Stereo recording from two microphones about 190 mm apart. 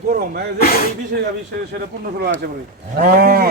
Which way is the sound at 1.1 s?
55° right (ahead or behind).